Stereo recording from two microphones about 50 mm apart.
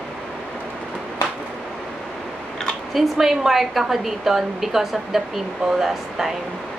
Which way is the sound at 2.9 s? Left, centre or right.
Centre.